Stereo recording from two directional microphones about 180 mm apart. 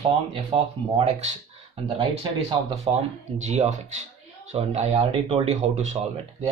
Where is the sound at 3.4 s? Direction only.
40° right (ahead or behind).